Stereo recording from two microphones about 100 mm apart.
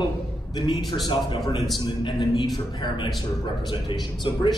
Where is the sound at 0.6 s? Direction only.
50° left (ahead or behind).